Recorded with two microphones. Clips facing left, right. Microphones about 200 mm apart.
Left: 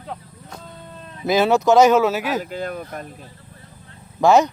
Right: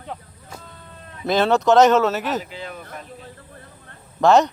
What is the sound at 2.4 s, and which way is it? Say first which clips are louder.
Speech: left 6 dB; 45° left (ahead or behind).